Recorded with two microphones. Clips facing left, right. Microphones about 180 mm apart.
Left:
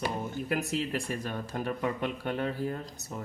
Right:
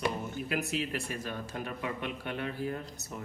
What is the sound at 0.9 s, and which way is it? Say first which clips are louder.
Speech: left 3 dB; 40° left (ahead or behind).